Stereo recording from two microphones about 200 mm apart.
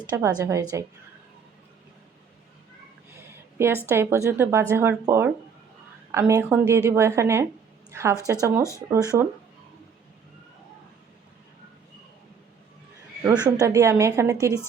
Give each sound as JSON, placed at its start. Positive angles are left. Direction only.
{"t": 0.0, "sound": "a woman's voice", "side_deg": -20}
{"t": 3.8, "sound": "a woman's voice", "side_deg": -10}
{"t": 13.2, "sound": "a woman's voice", "side_deg": -15}